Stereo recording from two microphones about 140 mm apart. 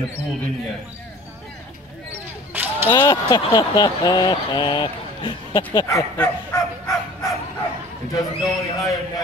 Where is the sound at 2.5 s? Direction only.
15° right (ahead or behind).